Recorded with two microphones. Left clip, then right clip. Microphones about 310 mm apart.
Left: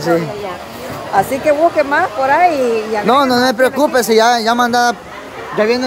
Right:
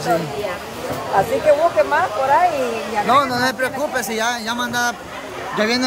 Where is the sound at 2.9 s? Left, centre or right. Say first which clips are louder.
Left 3 dB; left.